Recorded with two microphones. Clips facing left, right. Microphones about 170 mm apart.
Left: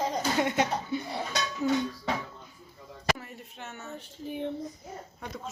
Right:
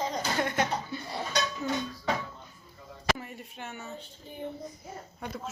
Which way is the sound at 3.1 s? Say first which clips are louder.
Right 2 dB; centre (ahead or behind).